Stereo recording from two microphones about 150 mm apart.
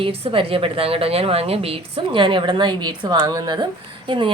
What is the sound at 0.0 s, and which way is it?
A woman's voice, 35° right (ahead or behind).